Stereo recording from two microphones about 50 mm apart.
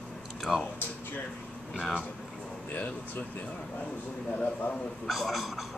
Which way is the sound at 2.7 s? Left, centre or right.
Left.